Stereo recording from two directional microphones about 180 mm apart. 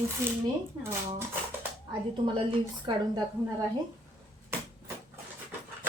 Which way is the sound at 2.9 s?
25° right (ahead or behind).